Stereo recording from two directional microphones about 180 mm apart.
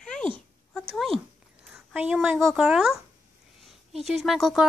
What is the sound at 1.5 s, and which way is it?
Speech, 5° right (ahead or behind).